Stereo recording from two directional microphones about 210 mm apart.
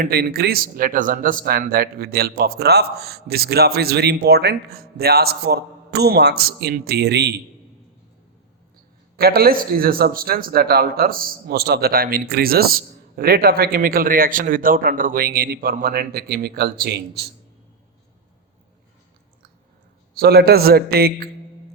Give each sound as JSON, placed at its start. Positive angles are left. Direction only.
{"t": 0.0, "sound": "a man's voice", "side_deg": -45}
{"t": 9.1, "sound": "a man's voice", "side_deg": -45}
{"t": 20.1, "sound": "a man's voice", "side_deg": -50}